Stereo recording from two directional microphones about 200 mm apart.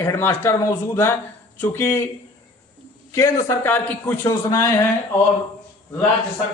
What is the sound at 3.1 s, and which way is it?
A man's voice, 15° left (ahead or behind).